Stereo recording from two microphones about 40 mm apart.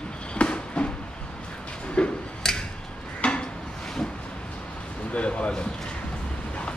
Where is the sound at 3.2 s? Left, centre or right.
Left.